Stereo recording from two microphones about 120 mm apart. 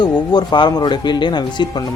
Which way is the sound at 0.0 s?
40° left (ahead or behind).